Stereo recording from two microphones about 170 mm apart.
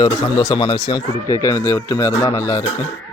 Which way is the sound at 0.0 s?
25° left (ahead or behind).